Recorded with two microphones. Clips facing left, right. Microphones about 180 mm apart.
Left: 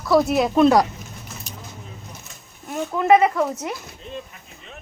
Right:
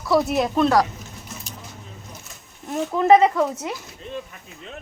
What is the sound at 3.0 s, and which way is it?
Speech, 30° right (ahead or behind).